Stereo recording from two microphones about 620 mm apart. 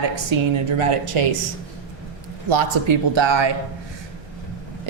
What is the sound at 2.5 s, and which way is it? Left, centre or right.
Speech, right.